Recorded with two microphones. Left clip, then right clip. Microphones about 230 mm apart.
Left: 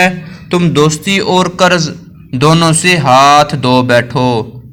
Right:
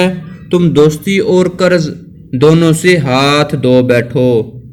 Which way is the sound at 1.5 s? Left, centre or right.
Left.